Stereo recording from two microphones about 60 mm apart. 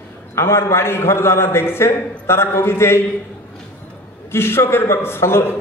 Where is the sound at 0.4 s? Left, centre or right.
Left.